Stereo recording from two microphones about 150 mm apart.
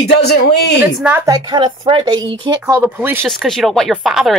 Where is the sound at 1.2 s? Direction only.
30° right (ahead or behind).